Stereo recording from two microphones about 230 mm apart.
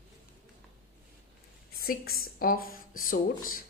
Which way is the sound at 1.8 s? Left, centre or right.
Left.